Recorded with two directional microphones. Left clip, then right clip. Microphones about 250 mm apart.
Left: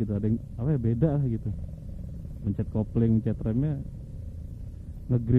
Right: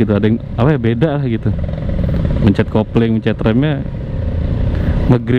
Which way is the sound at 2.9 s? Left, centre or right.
Centre.